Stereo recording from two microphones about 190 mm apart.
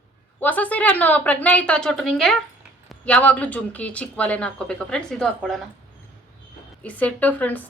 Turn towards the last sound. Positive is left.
turn(degrees=10)  # may be behind; listen again after turning